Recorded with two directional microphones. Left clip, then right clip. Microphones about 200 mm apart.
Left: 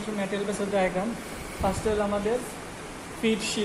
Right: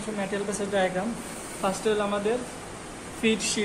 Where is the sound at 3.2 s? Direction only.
15° right (ahead or behind).